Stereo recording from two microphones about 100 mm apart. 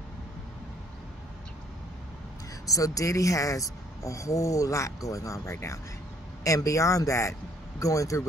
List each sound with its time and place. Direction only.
2.6 s speech: 35° left (ahead or behind)